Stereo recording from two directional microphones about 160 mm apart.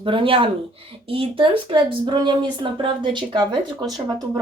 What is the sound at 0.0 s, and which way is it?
Speech, 30° right (ahead or behind).